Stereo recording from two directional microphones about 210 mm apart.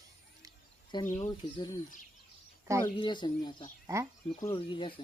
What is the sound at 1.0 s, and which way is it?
Speech, 25° left (ahead or behind).